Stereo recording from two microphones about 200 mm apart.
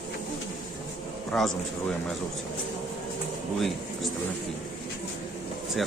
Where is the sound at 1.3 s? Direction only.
Centre (ahead or behind).